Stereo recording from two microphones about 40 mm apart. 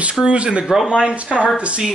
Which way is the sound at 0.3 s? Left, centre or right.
Right.